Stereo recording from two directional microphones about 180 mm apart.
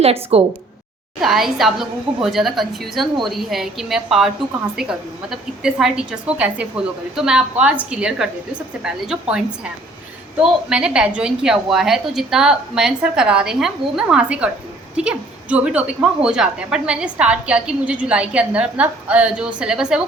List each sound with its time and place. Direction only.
0.0 s speech: 35° right (ahead or behind)
1.2 s a woman's voice: centre (ahead or behind)